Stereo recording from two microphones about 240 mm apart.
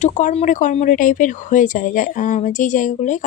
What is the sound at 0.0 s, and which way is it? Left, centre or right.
A woman's voice, left.